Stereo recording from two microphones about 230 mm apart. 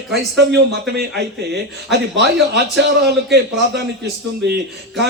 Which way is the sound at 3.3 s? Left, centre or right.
Right.